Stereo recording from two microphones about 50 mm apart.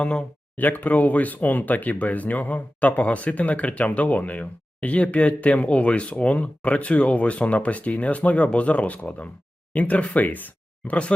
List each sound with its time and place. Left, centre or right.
0.0 s speech: centre
0.5 s speech: left